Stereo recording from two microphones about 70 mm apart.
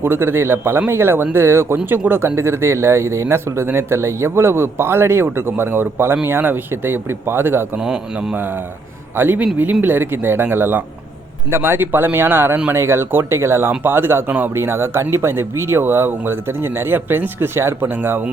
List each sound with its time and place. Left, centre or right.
0.0 s speech: right
7.8 s speech: centre
9.1 s speech: right
14.5 s speech: right